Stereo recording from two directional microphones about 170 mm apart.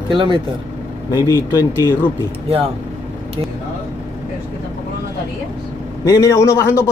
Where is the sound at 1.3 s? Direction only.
15° left (ahead or behind).